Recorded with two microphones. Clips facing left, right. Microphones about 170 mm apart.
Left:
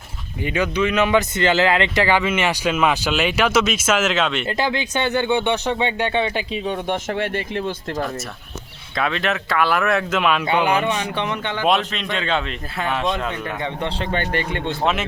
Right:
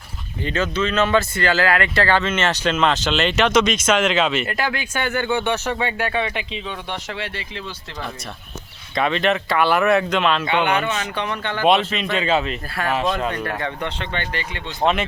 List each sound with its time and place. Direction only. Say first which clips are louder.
0.4 s speech: left 2 dB; 15° left (ahead or behind)
4.4 s speech: left 3 dB; 25° left (ahead or behind)
6.5 s speech: left 6 dB; 45° left (ahead or behind)
9.0 s speech: right 3 dB; centre (ahead or behind); by 11.6 s 15° left (ahead or behind)
11.6 s speech: right 3 dB; centre (ahead or behind)
13.3 s speech: right 1 dB; 10° left (ahead or behind)
13.7 s speech: left 3 dB; 35° left (ahead or behind); by 14.8 s 55° left (ahead or behind)